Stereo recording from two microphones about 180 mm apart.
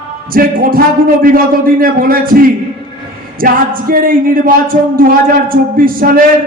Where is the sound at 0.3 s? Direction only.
55° right (ahead or behind).